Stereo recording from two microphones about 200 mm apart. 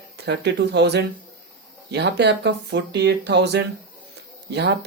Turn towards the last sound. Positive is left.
turn(degrees=-55)  # may be behind; listen again after turning